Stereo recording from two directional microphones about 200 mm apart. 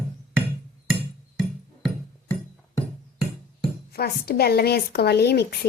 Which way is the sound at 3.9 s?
50° left (ahead or behind).